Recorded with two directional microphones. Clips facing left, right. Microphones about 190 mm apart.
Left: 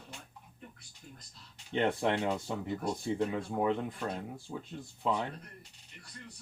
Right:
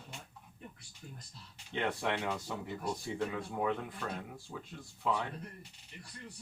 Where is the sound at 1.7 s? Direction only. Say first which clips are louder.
Left 5 dB; 25° left (ahead or behind).